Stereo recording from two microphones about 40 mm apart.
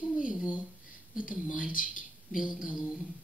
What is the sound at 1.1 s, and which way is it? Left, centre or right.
Speech, centre.